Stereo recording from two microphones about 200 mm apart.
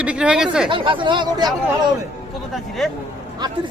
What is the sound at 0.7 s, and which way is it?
Speech, 25° right (ahead or behind).